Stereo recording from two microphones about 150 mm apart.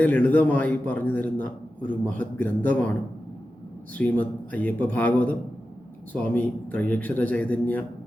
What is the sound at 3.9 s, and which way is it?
A man's voice, 10° left (ahead or behind).